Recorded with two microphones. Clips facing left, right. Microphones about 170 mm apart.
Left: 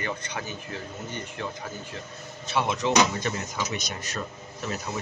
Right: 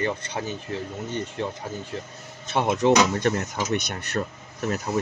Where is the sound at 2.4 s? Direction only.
50° right (ahead or behind).